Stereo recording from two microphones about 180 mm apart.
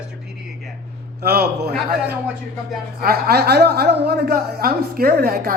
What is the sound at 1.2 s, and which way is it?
A man's voice, 60° right (ahead or behind).